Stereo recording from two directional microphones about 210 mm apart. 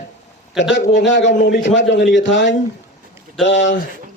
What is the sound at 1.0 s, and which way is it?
Speech, 60° left (ahead or behind).